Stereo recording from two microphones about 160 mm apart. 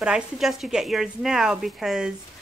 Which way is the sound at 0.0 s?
5° right (ahead or behind).